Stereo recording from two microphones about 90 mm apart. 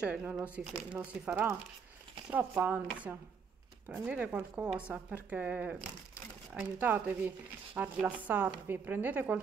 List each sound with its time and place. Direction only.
0.0 s speech: 15° right (ahead or behind)